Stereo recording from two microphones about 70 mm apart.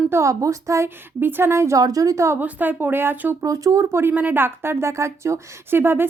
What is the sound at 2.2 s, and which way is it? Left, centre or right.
A woman's voice, right.